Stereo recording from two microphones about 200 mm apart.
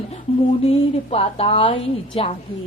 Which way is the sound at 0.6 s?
30° left (ahead or behind).